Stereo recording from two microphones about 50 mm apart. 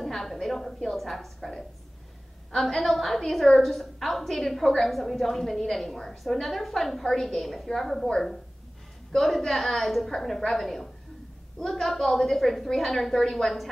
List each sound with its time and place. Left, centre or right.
0.0 s a woman's voice: centre